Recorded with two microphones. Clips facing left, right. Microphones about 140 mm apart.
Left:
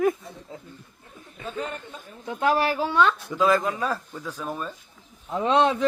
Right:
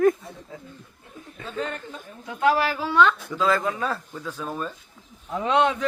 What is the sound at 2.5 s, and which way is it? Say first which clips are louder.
Speech: right 1 dB; 30° left (ahead or behind).